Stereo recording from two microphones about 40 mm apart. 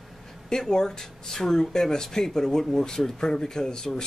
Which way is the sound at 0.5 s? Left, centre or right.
Centre.